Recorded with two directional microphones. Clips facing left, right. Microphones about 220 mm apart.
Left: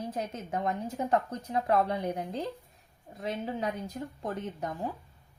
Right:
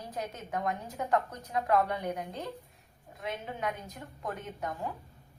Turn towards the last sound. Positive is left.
turn(degrees=30)  # may be behind; listen again after turning